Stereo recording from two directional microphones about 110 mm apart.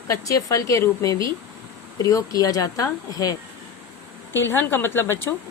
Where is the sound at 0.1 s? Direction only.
30° left (ahead or behind).